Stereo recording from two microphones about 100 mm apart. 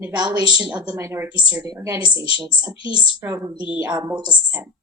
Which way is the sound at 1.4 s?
10° right (ahead or behind).